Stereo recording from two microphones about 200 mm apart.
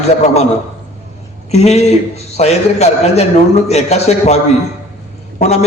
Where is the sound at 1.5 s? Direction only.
35° left (ahead or behind).